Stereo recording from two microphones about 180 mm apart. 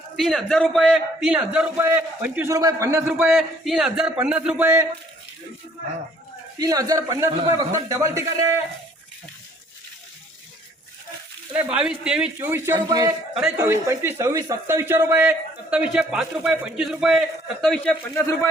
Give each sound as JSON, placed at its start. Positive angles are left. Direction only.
{"t": 0.2, "sound": "a man's voice", "side_deg": 0}
{"t": 6.6, "sound": "a man's voice", "side_deg": -20}
{"t": 11.5, "sound": "a man's voice", "side_deg": -10}